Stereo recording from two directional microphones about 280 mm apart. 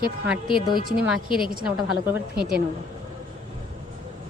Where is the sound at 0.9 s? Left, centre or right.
Centre.